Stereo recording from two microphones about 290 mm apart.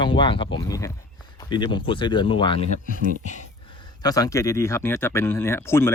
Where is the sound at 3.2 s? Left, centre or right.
Left.